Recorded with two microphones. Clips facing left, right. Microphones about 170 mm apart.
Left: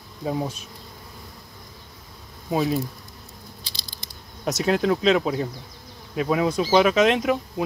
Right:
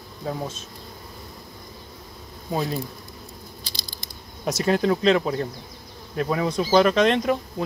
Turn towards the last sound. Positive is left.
turn(degrees=5)  # may be behind; listen again after turning